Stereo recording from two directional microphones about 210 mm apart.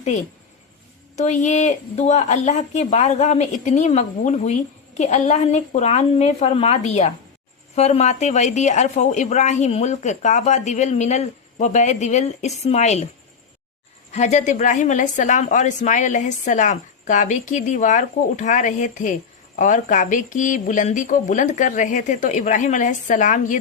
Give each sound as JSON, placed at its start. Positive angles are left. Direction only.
{"t": 1.1, "sound": "a woman's voice", "side_deg": 35}
{"t": 14.1, "sound": "a woman's voice", "side_deg": 35}